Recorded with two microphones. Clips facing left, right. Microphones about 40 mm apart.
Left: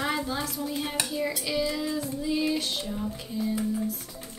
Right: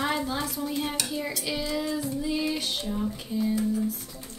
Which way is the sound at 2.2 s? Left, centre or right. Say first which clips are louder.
Left 4 dB; centre.